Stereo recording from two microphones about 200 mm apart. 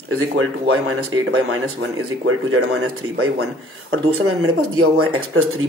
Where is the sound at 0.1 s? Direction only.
90° right.